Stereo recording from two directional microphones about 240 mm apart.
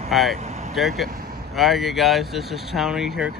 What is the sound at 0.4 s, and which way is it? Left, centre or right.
Vehicle, right.